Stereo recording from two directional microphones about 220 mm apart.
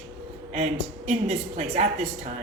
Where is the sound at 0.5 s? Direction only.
30° right (ahead or behind).